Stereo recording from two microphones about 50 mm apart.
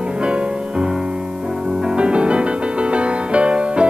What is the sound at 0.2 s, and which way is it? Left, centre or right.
Music, right.